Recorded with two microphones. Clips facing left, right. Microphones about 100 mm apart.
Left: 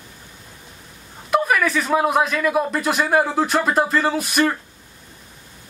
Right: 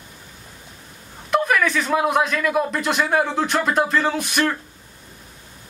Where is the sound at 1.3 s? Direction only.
5° left (ahead or behind).